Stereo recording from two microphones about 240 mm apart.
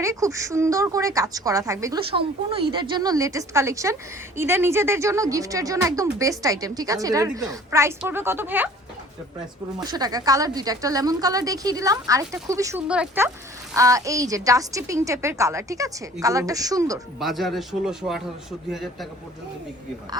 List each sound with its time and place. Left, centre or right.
0.0 s speech: centre
9.8 s speech: centre
17.2 s a man's voice: centre